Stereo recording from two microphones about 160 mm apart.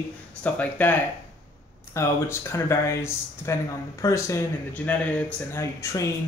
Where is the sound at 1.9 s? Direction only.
15° left (ahead or behind).